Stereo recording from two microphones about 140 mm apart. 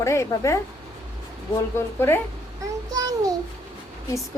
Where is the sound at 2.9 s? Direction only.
25° right (ahead or behind).